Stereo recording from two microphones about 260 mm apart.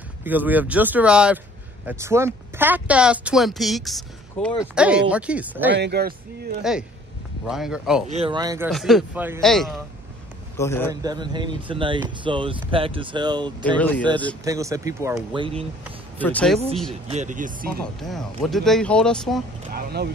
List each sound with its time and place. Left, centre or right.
0.2 s speech: centre
5.8 s a man's voice: right
7.4 s speech: centre
8.1 s speech: right
8.6 s a man's voice: centre
10.9 s speech: centre
13.7 s speech: centre
14.4 s speech: centre
16.2 s speech: centre
17.1 s speech: right
18.0 s speech: centre
19.7 s a man's voice: right